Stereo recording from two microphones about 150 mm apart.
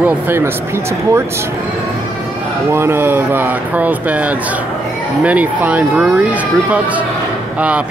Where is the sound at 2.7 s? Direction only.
15° right (ahead or behind).